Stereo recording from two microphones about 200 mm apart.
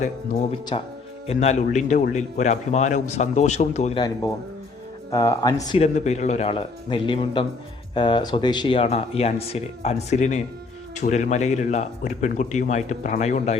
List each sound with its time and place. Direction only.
0.7 s a man's voice: 30° left (ahead or behind)
5.1 s speech: 15° left (ahead or behind)
5.8 s a man's voice: 35° left (ahead or behind)